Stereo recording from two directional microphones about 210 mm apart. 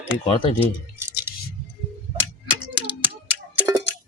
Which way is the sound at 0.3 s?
25° left (ahead or behind).